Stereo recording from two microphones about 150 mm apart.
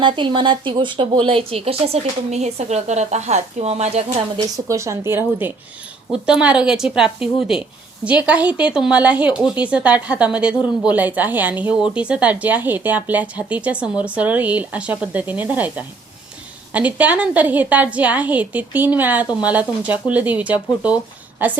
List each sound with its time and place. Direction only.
0.0 s speech: 30° right (ahead or behind)
4.4 s speech: 20° right (ahead or behind)